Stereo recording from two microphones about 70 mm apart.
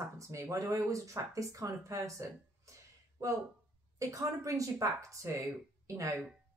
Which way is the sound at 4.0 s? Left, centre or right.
Right.